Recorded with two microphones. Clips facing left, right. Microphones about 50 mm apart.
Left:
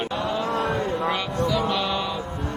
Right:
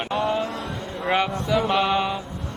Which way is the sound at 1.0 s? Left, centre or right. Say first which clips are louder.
Right 3 dB; right.